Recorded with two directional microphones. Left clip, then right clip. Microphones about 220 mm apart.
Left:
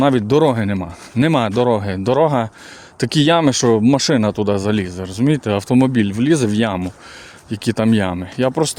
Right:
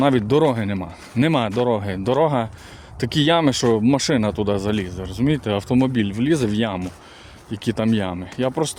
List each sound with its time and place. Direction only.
0.0 s speech: 20° left (ahead or behind)